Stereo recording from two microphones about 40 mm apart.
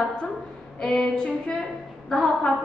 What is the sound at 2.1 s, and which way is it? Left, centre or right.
Music, centre.